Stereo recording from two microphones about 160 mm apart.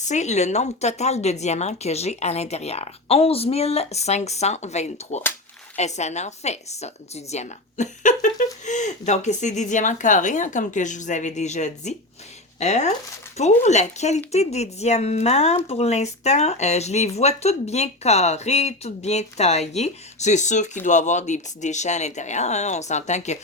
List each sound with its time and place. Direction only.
0.0 s speech: 45° left (ahead or behind)